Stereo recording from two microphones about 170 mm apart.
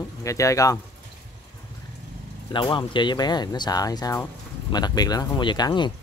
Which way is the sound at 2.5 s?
30° left (ahead or behind).